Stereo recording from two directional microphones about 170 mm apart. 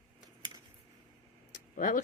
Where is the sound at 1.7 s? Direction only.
50° left (ahead or behind).